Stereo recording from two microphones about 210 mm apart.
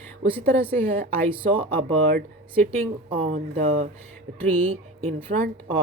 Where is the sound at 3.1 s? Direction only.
30° right (ahead or behind).